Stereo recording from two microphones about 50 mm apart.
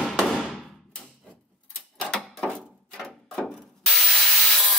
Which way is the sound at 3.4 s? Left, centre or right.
Centre.